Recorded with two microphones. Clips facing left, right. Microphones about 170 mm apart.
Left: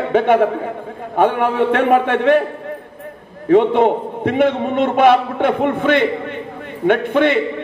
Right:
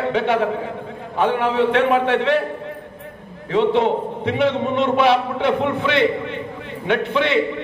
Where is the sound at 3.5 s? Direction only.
50° left (ahead or behind).